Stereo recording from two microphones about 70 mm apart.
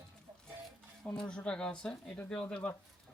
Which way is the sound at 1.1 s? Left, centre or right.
Centre.